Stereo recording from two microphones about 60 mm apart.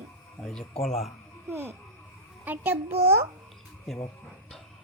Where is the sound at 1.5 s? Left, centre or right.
Right.